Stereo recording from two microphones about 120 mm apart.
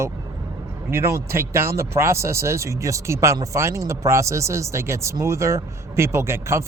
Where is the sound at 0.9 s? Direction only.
20° right (ahead or behind).